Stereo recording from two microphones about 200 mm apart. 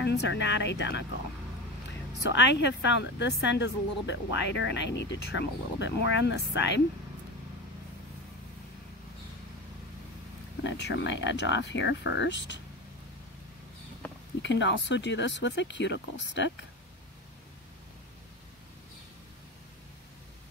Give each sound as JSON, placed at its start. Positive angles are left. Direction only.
{"t": 0.0, "sound": "speech", "side_deg": 60}
{"t": 2.2, "sound": "speech", "side_deg": 60}
{"t": 10.6, "sound": "speech", "side_deg": 60}
{"t": 14.4, "sound": "speech", "side_deg": 65}